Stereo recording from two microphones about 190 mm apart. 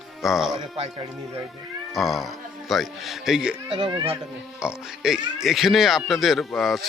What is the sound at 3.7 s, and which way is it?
Speech, 25° right (ahead or behind).